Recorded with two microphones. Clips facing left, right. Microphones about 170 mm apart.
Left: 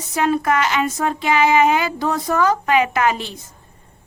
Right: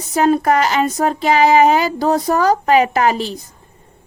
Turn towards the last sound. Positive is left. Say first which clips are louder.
# right 3 dB
turn(degrees=-35)  # may be behind; listen again after turning